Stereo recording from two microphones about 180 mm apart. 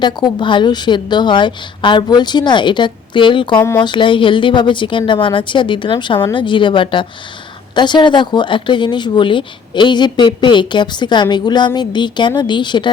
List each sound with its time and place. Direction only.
0.0 s speech: 25° left (ahead or behind)
3.6 s speech: 15° left (ahead or behind)
3.8 s speech: 25° left (ahead or behind)